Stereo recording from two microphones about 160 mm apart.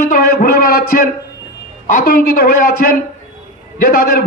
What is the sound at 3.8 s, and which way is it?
Speech, 75° left (ahead or behind).